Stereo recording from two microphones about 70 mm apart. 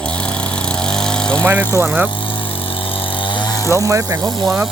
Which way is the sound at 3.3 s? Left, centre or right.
Left.